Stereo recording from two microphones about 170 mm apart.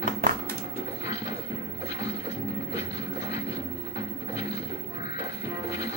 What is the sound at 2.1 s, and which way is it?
Music, 40° left (ahead or behind).